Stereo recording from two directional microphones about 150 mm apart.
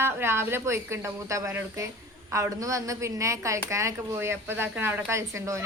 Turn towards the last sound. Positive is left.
turn(degrees=-20)  # may be behind; listen again after turning